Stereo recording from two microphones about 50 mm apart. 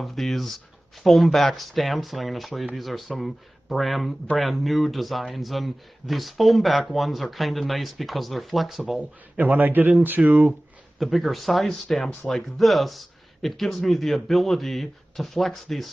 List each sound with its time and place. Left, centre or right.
0.0 s a man's voice: centre
9.4 s a man's voice: right
11.0 s a man's voice: centre